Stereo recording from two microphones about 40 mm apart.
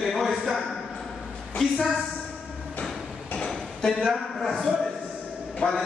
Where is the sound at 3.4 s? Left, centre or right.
Centre.